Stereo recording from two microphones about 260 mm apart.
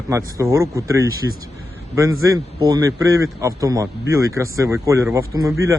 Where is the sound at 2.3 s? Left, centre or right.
Centre.